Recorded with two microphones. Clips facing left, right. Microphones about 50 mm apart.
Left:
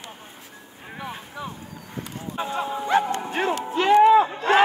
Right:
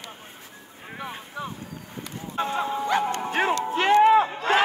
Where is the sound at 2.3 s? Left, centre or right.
Centre.